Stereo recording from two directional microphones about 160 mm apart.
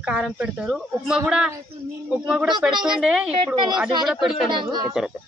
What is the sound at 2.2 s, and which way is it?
Speech, 5° right (ahead or behind).